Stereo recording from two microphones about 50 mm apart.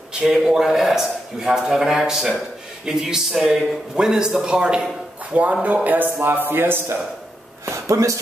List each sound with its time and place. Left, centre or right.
0.1 s a man's voice: centre
5.3 s speech: right
7.6 s speech: right